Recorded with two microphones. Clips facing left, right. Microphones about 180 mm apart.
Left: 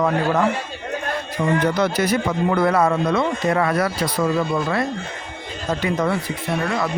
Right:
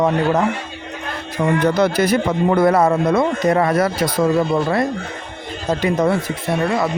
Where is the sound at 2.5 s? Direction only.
30° right (ahead or behind).